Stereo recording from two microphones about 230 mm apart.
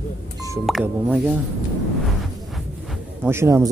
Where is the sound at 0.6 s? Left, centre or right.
Centre.